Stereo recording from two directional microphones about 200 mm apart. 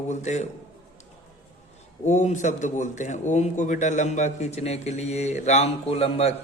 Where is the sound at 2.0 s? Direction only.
35° left (ahead or behind).